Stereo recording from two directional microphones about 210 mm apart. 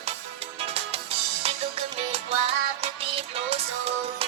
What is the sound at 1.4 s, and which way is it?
Music, 30° right (ahead or behind).